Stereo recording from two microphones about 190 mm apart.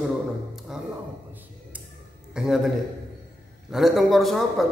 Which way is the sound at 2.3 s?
Centre (ahead or behind).